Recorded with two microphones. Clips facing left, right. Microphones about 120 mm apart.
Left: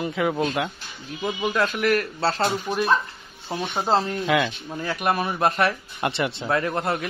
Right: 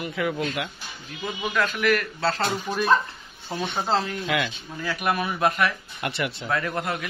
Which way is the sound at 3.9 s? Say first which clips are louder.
Left 5 dB; 30° left (ahead or behind).